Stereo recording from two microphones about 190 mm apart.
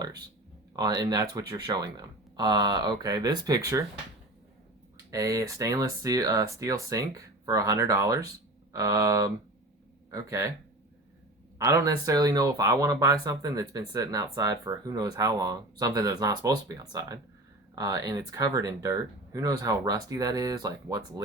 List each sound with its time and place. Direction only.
0.8 s speech: 20° right (ahead or behind)
5.1 s speech: 20° right (ahead or behind)
11.5 s speech: 15° right (ahead or behind)